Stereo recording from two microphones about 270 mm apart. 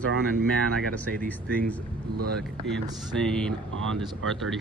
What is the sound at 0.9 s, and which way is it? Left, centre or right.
Speech, centre.